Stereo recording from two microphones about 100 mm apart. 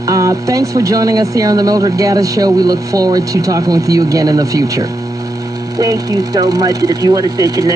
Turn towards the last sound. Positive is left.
turn(degrees=-40)  # may be behind; listen again after turning